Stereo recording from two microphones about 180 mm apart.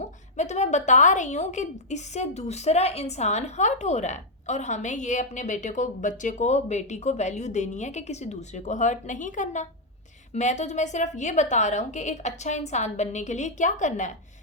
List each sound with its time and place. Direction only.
0.0 s a woman's voice: 40° left (ahead or behind)